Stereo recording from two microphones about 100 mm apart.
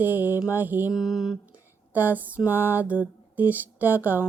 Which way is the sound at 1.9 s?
20° right (ahead or behind).